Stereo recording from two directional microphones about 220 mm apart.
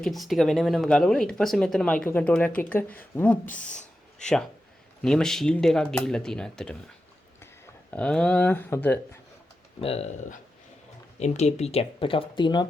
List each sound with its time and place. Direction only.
0.0 s speech: centre (ahead or behind)
3.4 s speech: 35° left (ahead or behind)
3.7 s a sound: 5° left (ahead or behind)
5.0 s speech: centre (ahead or behind)
7.9 s speech: 5° left (ahead or behind)
9.8 s speech: 30° left (ahead or behind)